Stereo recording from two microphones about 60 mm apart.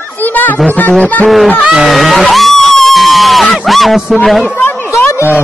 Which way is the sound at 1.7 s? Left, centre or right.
Centre.